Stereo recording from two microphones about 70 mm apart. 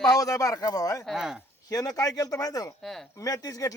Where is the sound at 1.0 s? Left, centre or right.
Centre.